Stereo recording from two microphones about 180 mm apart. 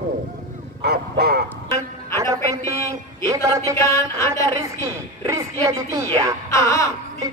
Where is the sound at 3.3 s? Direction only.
15° right (ahead or behind).